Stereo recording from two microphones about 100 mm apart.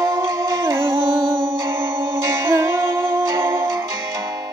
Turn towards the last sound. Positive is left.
turn(degrees=-25)  # may be behind; listen again after turning